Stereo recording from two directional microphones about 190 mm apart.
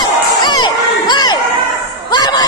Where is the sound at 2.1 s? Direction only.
20° left (ahead or behind).